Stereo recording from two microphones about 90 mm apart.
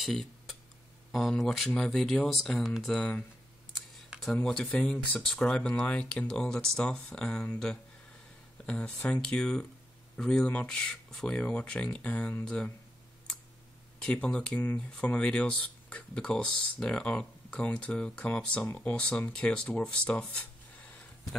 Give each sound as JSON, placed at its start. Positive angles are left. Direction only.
{"t": 0.0, "sound": "a sound", "side_deg": 0}
{"t": 1.1, "sound": "speech", "side_deg": 5}
{"t": 4.3, "sound": "speech", "side_deg": 10}
{"t": 13.9, "sound": "speech", "side_deg": 10}